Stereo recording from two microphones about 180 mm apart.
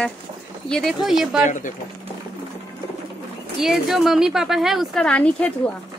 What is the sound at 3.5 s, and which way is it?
Speech, centre (ahead or behind).